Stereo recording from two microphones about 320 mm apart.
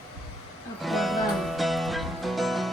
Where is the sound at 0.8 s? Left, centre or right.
Centre.